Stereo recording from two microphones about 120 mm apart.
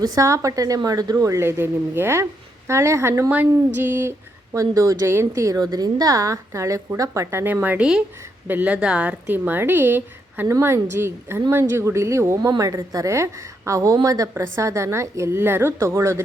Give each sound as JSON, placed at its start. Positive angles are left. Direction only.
{"t": 0.0, "sound": "a woman's voice", "side_deg": -30}